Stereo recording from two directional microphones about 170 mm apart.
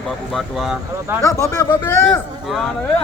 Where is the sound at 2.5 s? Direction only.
5° right (ahead or behind).